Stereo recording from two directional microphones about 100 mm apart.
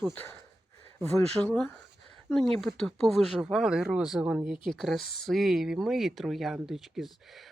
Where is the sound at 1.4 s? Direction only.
5° right (ahead or behind).